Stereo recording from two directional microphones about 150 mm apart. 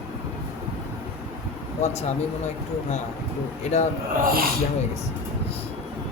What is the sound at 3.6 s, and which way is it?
Speech, 50° left (ahead or behind).